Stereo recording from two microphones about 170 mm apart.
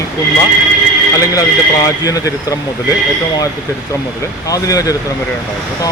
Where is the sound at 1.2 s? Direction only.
20° left (ahead or behind).